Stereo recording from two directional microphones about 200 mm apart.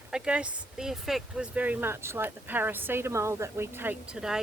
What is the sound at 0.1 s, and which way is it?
Speech, 5° right (ahead or behind).